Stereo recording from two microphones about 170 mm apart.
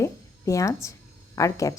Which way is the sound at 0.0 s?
20° left (ahead or behind).